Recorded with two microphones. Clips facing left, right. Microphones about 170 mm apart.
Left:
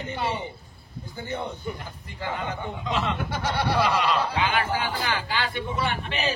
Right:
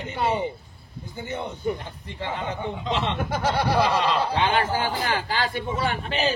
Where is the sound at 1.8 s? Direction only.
30° right (ahead or behind).